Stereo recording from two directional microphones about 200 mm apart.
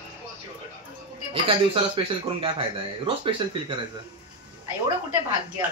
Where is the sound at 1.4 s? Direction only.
25° right (ahead or behind).